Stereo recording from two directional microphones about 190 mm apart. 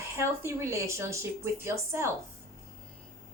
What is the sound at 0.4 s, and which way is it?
Speech, 15° right (ahead or behind).